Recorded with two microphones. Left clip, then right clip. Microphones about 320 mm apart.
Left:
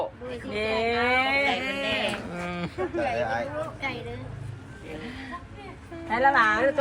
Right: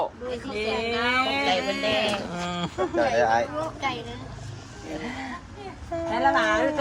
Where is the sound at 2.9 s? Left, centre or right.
Right.